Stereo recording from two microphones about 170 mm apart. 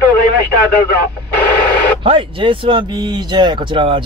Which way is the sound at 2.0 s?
30° right (ahead or behind).